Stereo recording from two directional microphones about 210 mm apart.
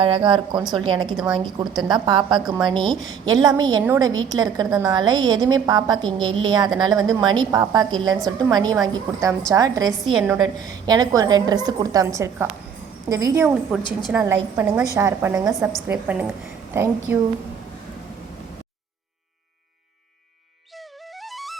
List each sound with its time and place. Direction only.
0.0 s a woman's voice: 25° right (ahead or behind)
1.1 s a woman's voice: centre (ahead or behind)
1.5 s a woman's voice: 20° right (ahead or behind)
10.2 s a woman's voice: 5° right (ahead or behind)
10.8 s a woman's voice: 20° right (ahead or behind)
21.2 s flute: centre (ahead or behind)